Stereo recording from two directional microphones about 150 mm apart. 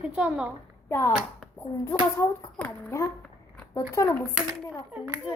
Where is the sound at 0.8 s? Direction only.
15° left (ahead or behind).